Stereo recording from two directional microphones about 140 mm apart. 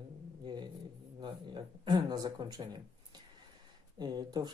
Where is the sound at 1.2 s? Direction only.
30° right (ahead or behind).